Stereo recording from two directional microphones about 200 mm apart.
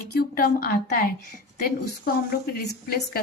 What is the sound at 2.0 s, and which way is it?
A woman's voice, 50° left (ahead or behind).